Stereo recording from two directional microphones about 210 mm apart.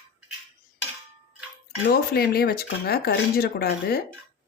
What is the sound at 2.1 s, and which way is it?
A woman's voice, 45° left (ahead or behind).